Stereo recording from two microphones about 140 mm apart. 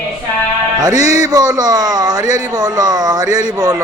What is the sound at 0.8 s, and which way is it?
Music, 30° right (ahead or behind).